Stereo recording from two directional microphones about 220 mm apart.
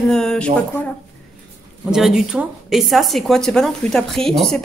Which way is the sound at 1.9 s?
Centre (ahead or behind).